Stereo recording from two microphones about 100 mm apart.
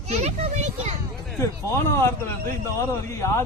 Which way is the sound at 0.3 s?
90° right.